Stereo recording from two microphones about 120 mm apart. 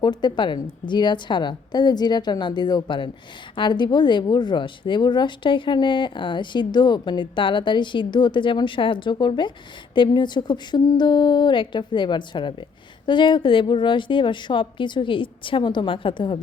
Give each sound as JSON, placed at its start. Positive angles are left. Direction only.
{"t": 0.0, "sound": "a woman's voice", "side_deg": 35}